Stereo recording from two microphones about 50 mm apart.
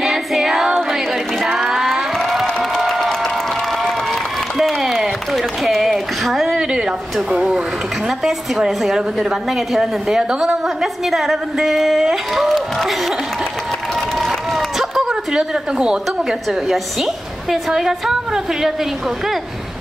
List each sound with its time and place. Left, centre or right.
0.0 s music: centre
2.1 s a sound: centre
2.9 s applause: centre
5.3 s a sound: centre
7.2 s speech: centre
8.1 s a woman's voice: centre
13.9 s applause: centre
14.8 s speech: centre
16.1 s a woman's voice: centre